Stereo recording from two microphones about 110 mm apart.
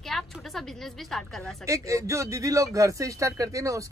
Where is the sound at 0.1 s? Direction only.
5° left (ahead or behind).